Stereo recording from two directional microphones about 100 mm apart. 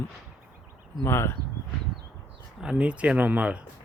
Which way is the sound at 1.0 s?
25° left (ahead or behind).